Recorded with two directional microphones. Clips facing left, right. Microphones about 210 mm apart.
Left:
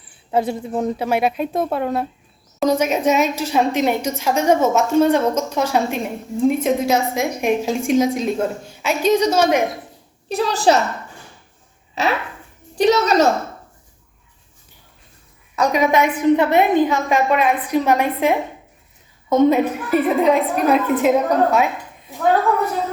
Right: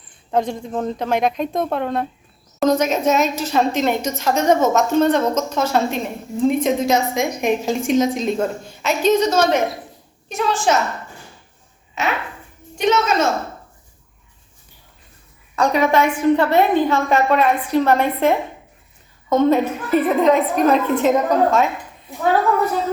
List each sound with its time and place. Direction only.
0.1 s a woman's voice: 5° left (ahead or behind)
10.2 s a woman's voice: 35° left (ahead or behind)
12.0 s a woman's voice: 35° left (ahead or behind)
15.5 s a woman's voice: 10° left (ahead or behind)